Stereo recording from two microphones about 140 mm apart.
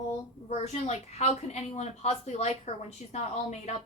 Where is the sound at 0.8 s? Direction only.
50° left (ahead or behind).